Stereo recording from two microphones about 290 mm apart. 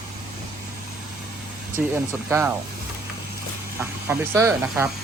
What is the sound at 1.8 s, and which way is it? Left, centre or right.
Speech, centre.